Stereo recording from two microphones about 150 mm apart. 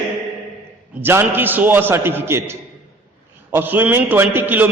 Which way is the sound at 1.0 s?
15° right (ahead or behind).